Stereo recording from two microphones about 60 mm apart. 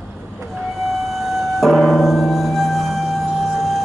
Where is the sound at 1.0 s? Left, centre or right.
Centre.